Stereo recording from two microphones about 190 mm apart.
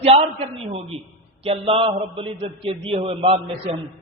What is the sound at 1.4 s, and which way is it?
A woman's voice, 30° right (ahead or behind).